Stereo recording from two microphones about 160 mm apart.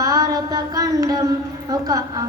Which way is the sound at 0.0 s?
20° right (ahead or behind).